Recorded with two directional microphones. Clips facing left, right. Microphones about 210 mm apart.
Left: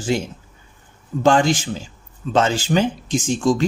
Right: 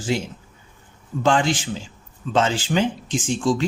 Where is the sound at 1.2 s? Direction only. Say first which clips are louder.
Left 4 dB; 40° left (ahead or behind).